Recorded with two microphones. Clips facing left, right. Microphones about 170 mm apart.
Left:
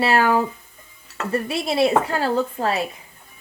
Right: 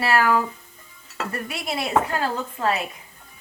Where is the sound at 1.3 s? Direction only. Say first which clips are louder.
Left 10 dB; 30° left (ahead or behind).